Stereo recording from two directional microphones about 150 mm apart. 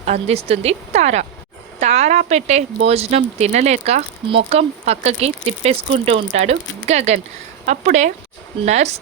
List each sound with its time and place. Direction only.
0.0 s speech: 45° right (ahead or behind)